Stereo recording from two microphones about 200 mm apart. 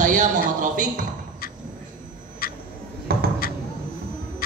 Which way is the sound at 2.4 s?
50° left (ahead or behind).